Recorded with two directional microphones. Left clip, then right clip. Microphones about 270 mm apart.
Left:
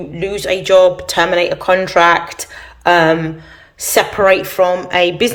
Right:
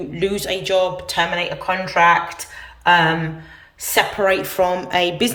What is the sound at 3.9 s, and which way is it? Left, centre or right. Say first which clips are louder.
Speech: left 6 dB; centre.